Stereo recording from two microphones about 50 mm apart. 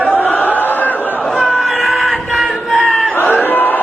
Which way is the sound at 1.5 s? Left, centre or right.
Centre.